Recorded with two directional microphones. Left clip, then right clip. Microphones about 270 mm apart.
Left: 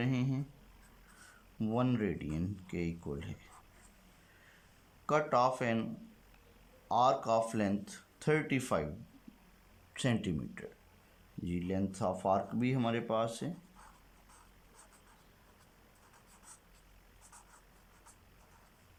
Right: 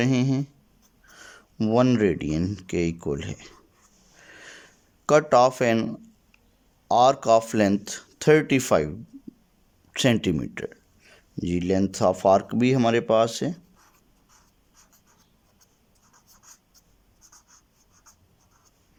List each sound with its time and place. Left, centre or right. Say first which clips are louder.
0.0 s speech: right 13 dB; right
1.5 s speech: right 14 dB; right
5.0 s speech: right 12 dB; right
9.9 s speech: right 14 dB; right